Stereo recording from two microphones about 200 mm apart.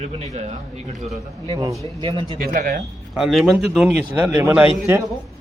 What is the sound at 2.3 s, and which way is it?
Speech, 45° right (ahead or behind).